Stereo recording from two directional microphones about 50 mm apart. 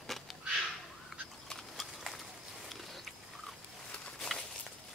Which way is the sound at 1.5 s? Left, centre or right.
Centre.